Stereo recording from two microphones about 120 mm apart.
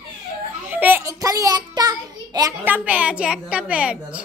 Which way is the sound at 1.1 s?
30° right (ahead or behind).